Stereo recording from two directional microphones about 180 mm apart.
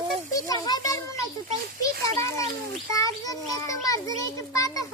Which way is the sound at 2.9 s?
20° left (ahead or behind).